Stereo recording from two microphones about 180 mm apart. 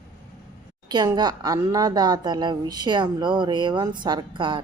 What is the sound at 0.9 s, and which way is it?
Speech, 25° right (ahead or behind).